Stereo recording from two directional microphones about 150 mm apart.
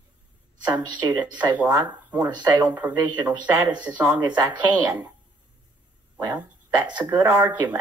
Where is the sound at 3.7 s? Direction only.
30° right (ahead or behind).